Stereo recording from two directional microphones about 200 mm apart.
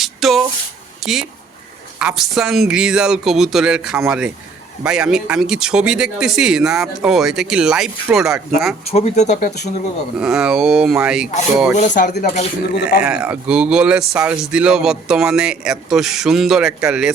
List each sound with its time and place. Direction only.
0.0 s a sound: centre (ahead or behind)
1.0 s speech: centre (ahead or behind)
8.9 s speech: 30° left (ahead or behind)
10.2 s speech: 5° right (ahead or behind)
11.8 s speech: 40° left (ahead or behind)
13.0 s speech: 5° right (ahead or behind)